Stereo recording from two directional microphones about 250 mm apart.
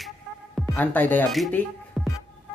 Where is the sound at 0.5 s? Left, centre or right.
Centre.